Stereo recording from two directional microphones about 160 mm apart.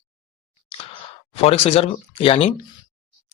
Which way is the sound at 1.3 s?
40° left (ahead or behind).